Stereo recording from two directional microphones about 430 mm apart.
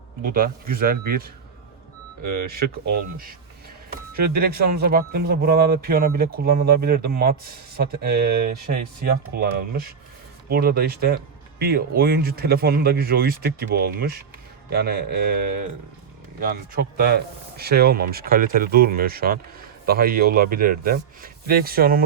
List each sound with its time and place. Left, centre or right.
0.2 s speech: centre
4.2 s speech: right
17.6 s speech: right